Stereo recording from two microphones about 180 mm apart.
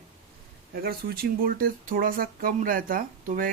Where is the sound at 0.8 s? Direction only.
55° right (ahead or behind).